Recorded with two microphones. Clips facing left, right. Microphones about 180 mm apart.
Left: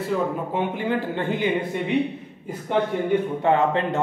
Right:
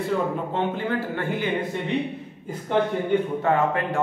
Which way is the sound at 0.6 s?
15° left (ahead or behind).